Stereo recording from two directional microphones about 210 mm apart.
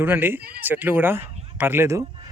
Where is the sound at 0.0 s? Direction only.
10° right (ahead or behind).